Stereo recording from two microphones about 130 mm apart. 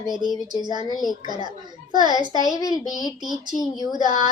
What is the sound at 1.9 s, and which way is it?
Female singing, 35° right (ahead or behind).